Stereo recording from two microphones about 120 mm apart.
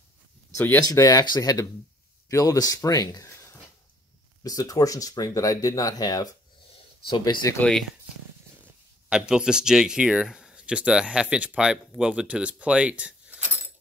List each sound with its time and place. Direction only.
0.8 s speech: 30° left (ahead or behind)
4.4 s speech: 30° left (ahead or behind)
6.7 s a sound: 40° left (ahead or behind)
7.5 s speech: 10° left (ahead or behind)
9.1 s speech: 5° right (ahead or behind)